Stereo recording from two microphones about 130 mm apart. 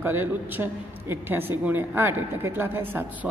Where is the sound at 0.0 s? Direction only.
15° right (ahead or behind).